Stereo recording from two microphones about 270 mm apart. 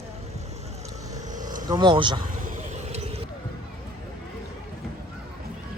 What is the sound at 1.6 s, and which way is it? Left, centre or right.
Speech, centre.